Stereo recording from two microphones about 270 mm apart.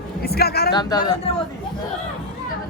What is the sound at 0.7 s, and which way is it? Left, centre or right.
Speech, centre.